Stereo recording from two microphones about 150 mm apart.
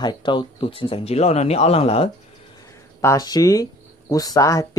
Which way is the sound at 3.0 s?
25° left (ahead or behind).